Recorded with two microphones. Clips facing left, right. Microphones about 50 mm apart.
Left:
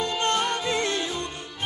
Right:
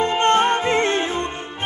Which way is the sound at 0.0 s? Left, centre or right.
Right.